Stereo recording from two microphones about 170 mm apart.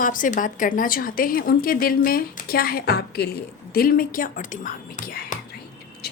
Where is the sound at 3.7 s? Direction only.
55° left (ahead or behind).